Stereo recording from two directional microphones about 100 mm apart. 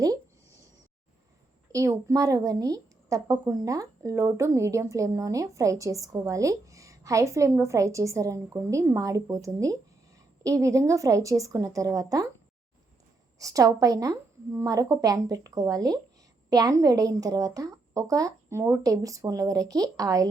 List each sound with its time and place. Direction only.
0.0 s a sound: 35° right (ahead or behind)
1.7 s a woman's voice: 30° right (ahead or behind)
13.4 s a woman's voice: 35° right (ahead or behind)